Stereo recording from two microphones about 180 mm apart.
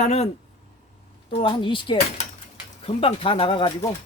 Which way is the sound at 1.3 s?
30° left (ahead or behind).